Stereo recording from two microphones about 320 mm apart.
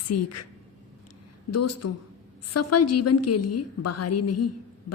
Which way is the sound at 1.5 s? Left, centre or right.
Left.